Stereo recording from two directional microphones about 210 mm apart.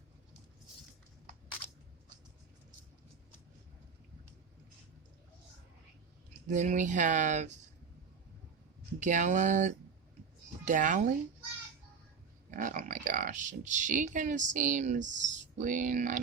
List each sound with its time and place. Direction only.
6.5 s speech: 35° right (ahead or behind)
9.0 s speech: 35° right (ahead or behind)
12.5 s speech: 35° right (ahead or behind)